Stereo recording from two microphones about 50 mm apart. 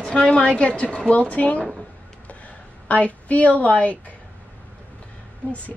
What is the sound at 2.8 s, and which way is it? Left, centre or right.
A woman's voice, left.